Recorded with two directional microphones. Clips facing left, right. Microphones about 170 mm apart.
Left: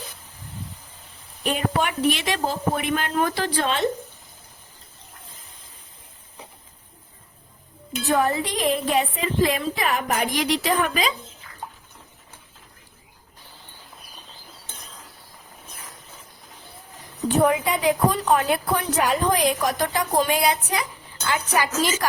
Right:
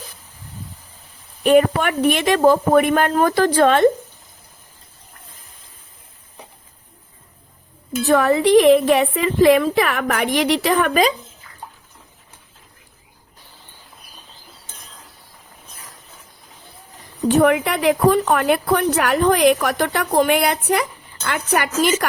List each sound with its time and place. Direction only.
1.5 s speech: 60° right (ahead or behind)
8.0 s a woman's voice: 80° right; by 11.0 s 60° right (ahead or behind)
17.2 s a woman's voice: 75° right (ahead or behind)